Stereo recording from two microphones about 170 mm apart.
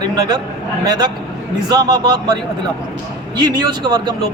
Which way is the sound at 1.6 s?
25° right (ahead or behind).